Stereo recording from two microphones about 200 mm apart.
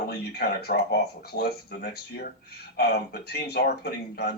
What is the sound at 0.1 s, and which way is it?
A man's voice, 50° left (ahead or behind).